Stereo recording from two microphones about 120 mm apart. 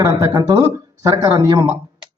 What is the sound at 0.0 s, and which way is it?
Speech, 25° right (ahead or behind).